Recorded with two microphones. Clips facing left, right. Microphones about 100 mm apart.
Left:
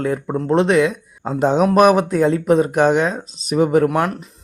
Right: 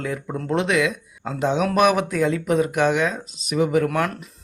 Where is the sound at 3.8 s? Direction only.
25° left (ahead or behind).